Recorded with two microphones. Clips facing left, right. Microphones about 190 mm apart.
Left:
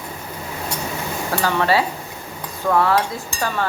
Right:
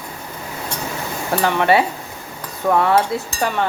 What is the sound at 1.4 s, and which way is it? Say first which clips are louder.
Speech: right 3 dB; 20° right (ahead or behind).